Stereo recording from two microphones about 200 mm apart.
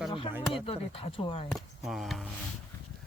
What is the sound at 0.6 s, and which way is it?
Speech, 30° left (ahead or behind).